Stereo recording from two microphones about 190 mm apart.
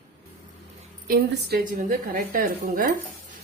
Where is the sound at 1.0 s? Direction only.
50° right (ahead or behind).